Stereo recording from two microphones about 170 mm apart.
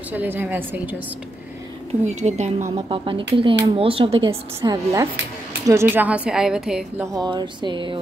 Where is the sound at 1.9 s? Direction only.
40° right (ahead or behind).